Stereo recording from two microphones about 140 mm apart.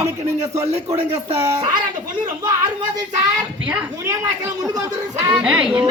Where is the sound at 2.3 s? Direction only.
30° right (ahead or behind).